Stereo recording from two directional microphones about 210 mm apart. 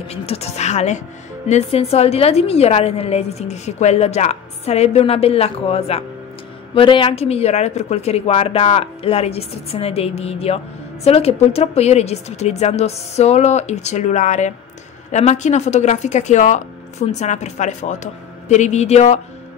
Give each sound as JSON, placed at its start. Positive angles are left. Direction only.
{"t": 0.1, "sound": "a woman's voice", "side_deg": 30}